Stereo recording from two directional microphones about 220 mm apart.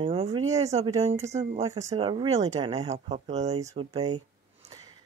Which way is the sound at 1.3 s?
30° right (ahead or behind).